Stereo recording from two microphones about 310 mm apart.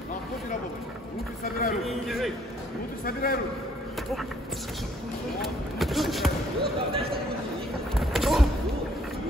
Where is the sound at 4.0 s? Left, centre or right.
Centre.